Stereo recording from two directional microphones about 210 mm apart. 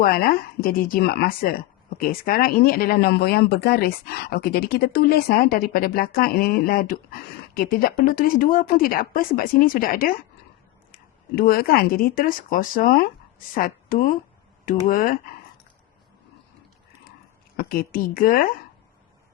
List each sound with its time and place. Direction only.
0.0 s a woman's voice: 45° left (ahead or behind)
17.6 s speech: 45° left (ahead or behind)